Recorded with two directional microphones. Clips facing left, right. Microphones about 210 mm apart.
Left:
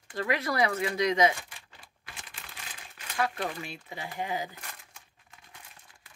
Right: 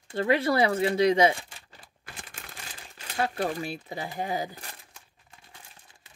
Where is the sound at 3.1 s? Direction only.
30° right (ahead or behind).